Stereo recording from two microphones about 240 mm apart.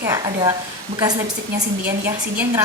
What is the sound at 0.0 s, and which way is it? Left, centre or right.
Speech, centre.